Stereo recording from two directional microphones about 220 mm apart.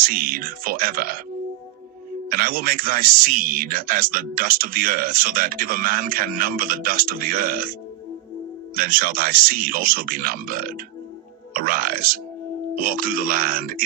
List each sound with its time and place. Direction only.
0.0 s a man's voice: 40° right (ahead or behind)
2.3 s a man's voice: 40° right (ahead or behind)